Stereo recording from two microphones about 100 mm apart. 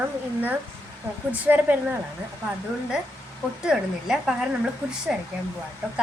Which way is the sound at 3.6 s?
5° right (ahead or behind).